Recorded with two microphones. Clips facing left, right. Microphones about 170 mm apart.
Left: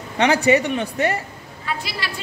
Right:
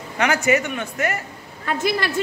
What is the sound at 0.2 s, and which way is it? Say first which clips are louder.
A man's voice: left 3 dB; 30° left (ahead or behind).